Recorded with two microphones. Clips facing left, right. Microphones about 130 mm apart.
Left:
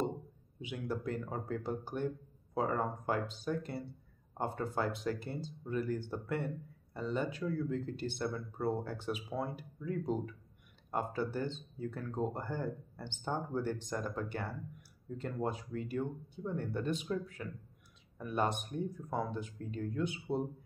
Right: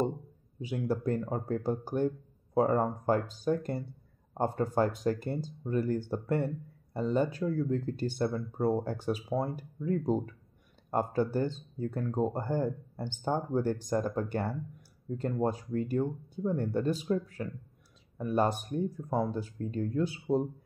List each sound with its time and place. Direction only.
0.6 s speech: 40° right (ahead or behind)